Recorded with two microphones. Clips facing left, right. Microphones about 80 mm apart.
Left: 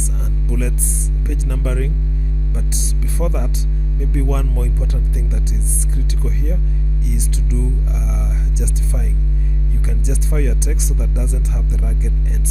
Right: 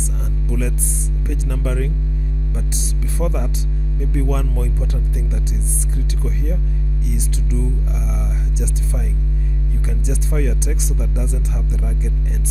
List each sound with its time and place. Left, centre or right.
0.5 s speech: centre
8.1 s speech: centre